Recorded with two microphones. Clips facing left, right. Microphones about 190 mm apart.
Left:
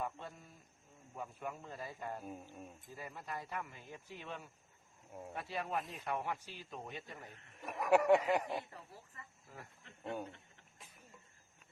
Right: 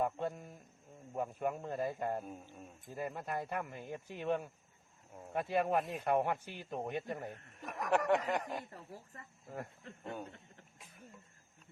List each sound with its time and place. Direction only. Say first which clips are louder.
0.0 s a sound: right 8 dB; 50° right (ahead or behind)
1.1 s speech: right 8 dB; 55° right (ahead or behind)
2.2 s speech: even; 5° left (ahead or behind)
2.9 s speech: right 8 dB; 55° right (ahead or behind)
7.6 s speech: left 3 dB; 5° left (ahead or behind)
8.7 s speech: right 4 dB; 45° right (ahead or behind)
10.0 s speech: left 2 dB; 5° left (ahead or behind)